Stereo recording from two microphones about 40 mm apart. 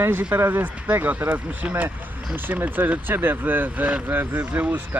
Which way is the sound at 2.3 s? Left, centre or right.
Right.